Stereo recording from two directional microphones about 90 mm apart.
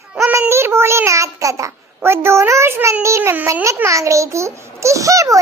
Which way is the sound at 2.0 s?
30° right (ahead or behind).